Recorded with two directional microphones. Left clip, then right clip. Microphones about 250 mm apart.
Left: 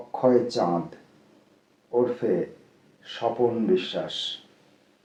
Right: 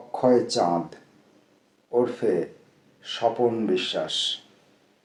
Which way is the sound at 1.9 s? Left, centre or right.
Right.